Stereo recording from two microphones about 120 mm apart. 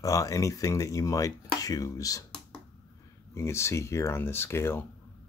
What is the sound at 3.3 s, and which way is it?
Speech, 25° left (ahead or behind).